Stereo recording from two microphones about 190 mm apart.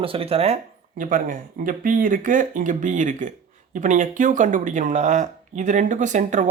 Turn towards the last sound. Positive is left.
turn(degrees=-40)  # may be behind; listen again after turning